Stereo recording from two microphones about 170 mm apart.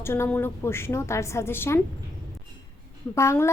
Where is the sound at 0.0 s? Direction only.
15° left (ahead or behind).